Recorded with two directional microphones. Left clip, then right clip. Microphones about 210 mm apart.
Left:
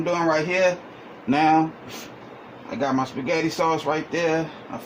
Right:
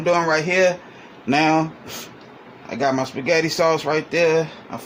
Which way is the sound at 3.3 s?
50° right (ahead or behind).